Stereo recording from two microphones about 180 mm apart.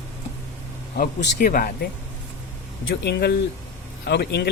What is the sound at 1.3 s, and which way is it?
Speech, 50° left (ahead or behind).